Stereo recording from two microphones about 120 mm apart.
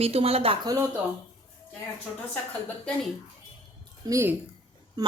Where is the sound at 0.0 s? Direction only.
55° right (ahead or behind).